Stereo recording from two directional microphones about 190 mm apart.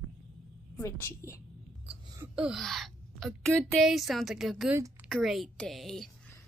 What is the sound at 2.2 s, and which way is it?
A woman's voice, 5° right (ahead or behind).